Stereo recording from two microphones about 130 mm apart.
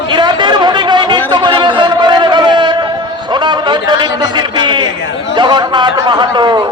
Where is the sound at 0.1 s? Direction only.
35° right (ahead or behind).